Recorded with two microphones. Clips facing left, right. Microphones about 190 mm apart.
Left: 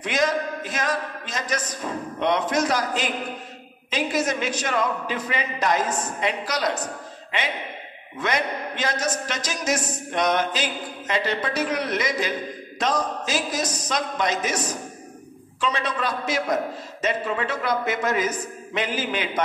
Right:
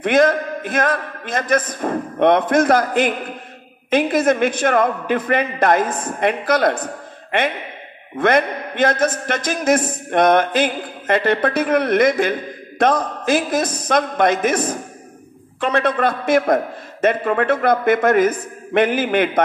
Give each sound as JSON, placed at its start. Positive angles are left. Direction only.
{"t": 0.0, "sound": "a man's voice", "side_deg": -55}